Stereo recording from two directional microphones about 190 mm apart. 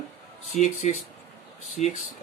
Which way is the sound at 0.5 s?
35° left (ahead or behind).